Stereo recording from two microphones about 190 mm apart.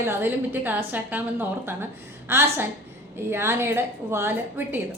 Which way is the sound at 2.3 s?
10° right (ahead or behind).